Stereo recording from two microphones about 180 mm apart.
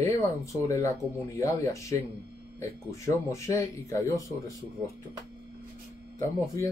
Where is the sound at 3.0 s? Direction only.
15° left (ahead or behind).